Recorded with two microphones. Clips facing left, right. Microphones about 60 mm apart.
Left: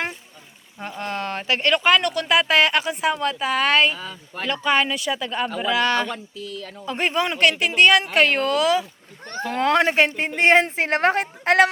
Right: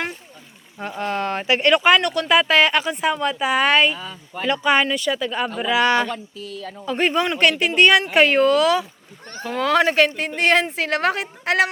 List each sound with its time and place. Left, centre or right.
0.8 s speech: centre
5.5 s speech: centre
6.8 s speech: centre
8.5 s speech: centre
9.2 s speech: left